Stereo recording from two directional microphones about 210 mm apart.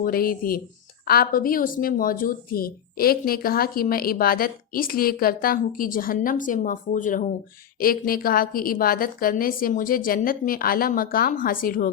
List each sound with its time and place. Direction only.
0.0 s speech: 45° left (ahead or behind)